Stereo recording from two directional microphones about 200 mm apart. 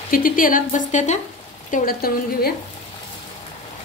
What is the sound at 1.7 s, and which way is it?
Speech, 45° left (ahead or behind).